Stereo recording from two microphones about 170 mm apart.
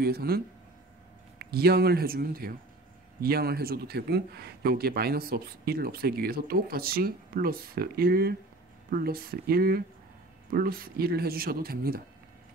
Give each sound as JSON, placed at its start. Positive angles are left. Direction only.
{"t": 0.0, "sound": "a man's voice", "side_deg": -65}
{"t": 1.4, "sound": "a man's voice", "side_deg": -70}